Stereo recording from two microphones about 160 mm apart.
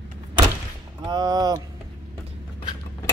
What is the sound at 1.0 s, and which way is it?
Speech, 25° right (ahead or behind).